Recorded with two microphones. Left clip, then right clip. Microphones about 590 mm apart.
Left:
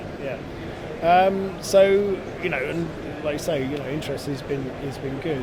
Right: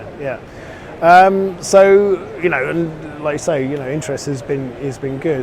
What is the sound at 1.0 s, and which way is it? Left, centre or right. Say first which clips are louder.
Speech: right 9 dB; right.